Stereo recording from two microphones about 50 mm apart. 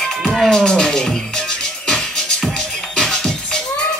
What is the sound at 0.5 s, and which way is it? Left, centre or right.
Music, centre.